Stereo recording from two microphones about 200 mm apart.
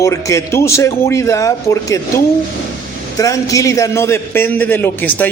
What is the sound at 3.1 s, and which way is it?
A man's voice, 15° left (ahead or behind).